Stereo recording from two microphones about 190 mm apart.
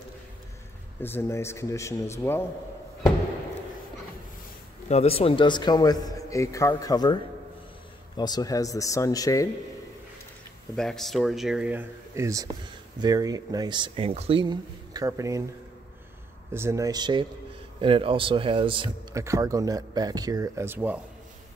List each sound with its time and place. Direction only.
1.0 s speech: 15° left (ahead or behind)
4.8 s a man's voice: 35° left (ahead or behind)
8.2 s speech: 20° left (ahead or behind)
10.8 s speech: centre (ahead or behind); by 15.4 s 15° right (ahead or behind)
16.5 s speech: 15° right (ahead or behind)
19.1 s speech: 15° right (ahead or behind)